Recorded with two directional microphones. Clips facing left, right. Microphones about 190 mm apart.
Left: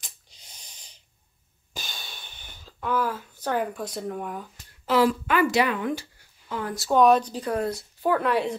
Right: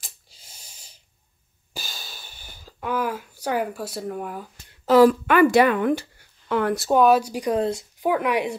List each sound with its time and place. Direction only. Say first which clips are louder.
0.0 s snort: right 1 dB; 5° right (ahead or behind)
1.7 s a sound: right 1 dB; 5° right (ahead or behind)
4.8 s a woman's voice: right 7 dB; 45° right (ahead or behind)
5.2 s speech: right 6 dB; 55° right (ahead or behind)
6.5 s speech: right 9 dB; 65° right (ahead or behind)
7.0 s speech: even; 5° right (ahead or behind)